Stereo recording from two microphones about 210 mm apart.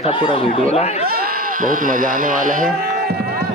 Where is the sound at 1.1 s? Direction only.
45° right (ahead or behind).